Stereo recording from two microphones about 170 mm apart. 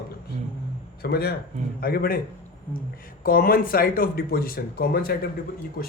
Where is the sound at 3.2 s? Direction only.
60° left (ahead or behind).